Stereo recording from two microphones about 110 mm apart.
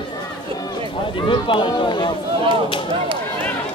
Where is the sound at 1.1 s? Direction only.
50° left (ahead or behind).